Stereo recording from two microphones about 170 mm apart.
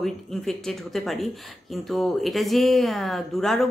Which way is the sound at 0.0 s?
Centre (ahead or behind).